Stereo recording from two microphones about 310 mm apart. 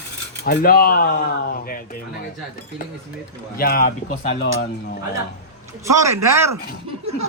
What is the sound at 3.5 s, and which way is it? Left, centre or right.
Speech, left.